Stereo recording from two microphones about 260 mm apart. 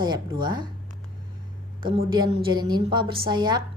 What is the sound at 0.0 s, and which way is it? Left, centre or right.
Speech, centre.